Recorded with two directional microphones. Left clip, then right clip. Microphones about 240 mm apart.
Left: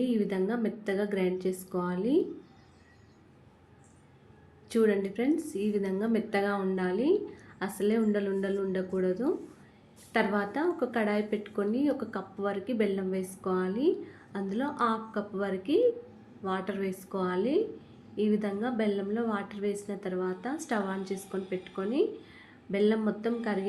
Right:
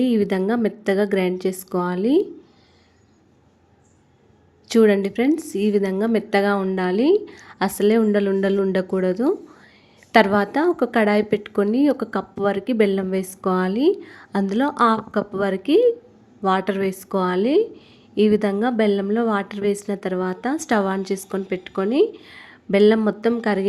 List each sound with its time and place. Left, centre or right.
0.0 s a woman's voice: right
4.7 s a woman's voice: right